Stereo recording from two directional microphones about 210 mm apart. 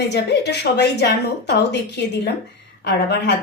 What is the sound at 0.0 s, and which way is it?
Speech, 55° left (ahead or behind).